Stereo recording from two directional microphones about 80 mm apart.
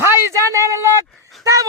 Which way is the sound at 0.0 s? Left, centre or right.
Right.